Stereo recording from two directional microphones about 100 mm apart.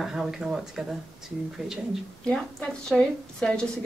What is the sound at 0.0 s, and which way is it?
Speech, 5° right (ahead or behind).